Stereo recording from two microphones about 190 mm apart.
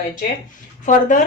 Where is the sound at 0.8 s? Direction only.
40° left (ahead or behind).